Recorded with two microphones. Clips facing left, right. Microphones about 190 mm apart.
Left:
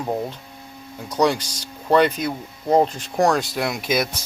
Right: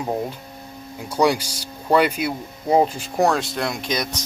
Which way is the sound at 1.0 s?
10° right (ahead or behind).